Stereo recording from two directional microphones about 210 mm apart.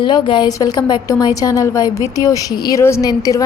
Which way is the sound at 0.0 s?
20° left (ahead or behind).